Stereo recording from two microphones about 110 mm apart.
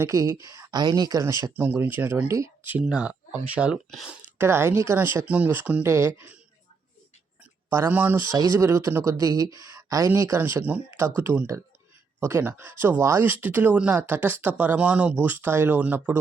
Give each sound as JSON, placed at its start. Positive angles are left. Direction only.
{"t": 0.0, "sound": "speech", "side_deg": -30}
{"t": 2.7, "sound": "speech", "side_deg": -10}
{"t": 4.4, "sound": "speech", "side_deg": -20}
{"t": 5.1, "sound": "speech", "side_deg": -15}
{"t": 7.7, "sound": "speech", "side_deg": -20}
{"t": 9.1, "sound": "speech", "side_deg": -35}